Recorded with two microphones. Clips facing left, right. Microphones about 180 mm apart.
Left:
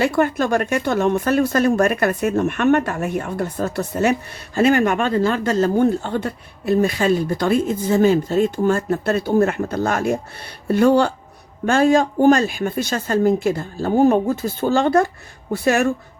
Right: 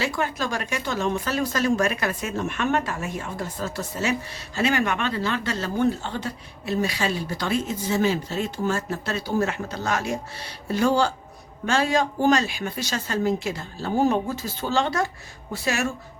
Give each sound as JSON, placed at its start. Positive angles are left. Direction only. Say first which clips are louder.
{"t": 0.0, "sound": "speech", "louder": "left 8 dB", "side_deg": 55}